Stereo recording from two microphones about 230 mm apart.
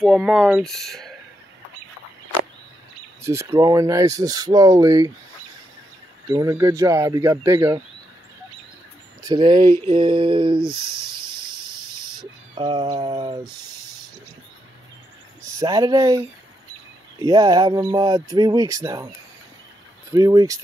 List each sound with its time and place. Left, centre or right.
0.0 s speech: centre
3.2 s speech: centre
6.2 s speech: centre
9.2 s speech: centre
11.1 s cricket: centre
15.4 s speech: centre
20.1 s speech: centre